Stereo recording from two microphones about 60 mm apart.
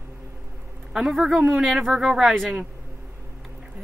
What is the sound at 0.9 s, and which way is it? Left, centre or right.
Speech, centre.